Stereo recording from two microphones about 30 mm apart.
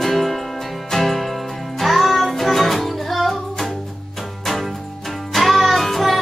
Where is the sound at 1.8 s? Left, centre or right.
Centre.